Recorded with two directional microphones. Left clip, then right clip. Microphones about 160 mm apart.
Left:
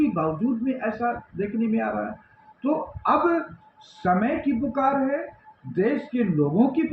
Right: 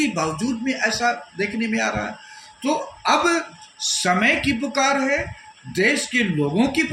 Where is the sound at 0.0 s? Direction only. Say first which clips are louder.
Right 1 dB; 25° right (ahead or behind).